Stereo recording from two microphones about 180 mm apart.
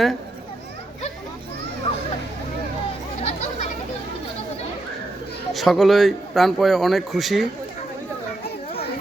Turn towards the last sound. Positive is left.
turn(degrees=0)  # may be behind; listen again after turning